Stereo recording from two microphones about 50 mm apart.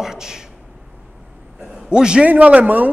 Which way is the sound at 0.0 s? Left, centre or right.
Centre.